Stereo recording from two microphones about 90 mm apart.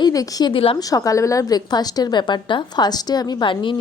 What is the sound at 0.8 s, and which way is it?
A woman's voice, 40° left (ahead or behind).